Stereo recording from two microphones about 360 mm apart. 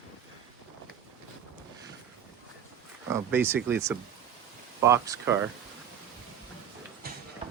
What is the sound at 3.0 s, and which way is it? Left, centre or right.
Speech, centre.